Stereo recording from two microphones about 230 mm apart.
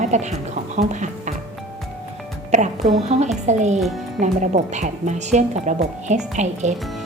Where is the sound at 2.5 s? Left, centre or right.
Right.